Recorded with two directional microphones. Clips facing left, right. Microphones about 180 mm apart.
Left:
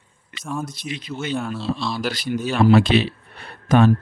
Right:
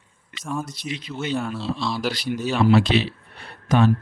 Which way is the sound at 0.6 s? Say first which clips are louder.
Left 1 dB; 50° left (ahead or behind).